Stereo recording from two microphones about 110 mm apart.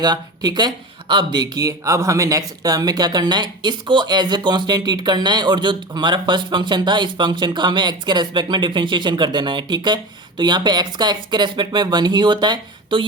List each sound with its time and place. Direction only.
0.0 s speech: 40° right (ahead or behind)